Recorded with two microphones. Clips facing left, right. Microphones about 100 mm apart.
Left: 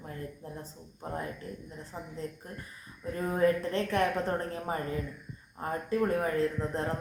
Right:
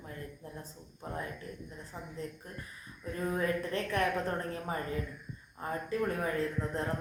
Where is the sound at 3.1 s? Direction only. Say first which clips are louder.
Left 5 dB; 25° left (ahead or behind).